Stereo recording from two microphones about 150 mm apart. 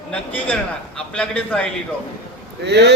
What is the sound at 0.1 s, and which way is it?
A man's voice, 10° left (ahead or behind).